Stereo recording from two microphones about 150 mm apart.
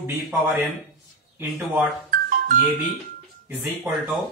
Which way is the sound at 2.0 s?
65° right (ahead or behind).